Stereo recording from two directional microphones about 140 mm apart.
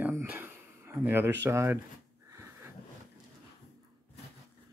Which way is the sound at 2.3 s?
20° right (ahead or behind).